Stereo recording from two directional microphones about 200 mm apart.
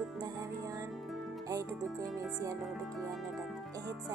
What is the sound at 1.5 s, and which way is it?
Music, 15° right (ahead or behind).